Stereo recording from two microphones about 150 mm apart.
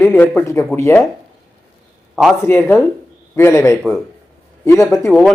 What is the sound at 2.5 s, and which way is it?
A man's voice, 15° left (ahead or behind).